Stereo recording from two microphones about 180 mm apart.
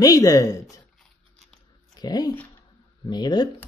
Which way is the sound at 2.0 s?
20° left (ahead or behind).